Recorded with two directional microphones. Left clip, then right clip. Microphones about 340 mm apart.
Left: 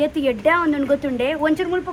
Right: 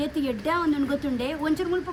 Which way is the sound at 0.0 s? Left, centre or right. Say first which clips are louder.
Left 9 dB; centre.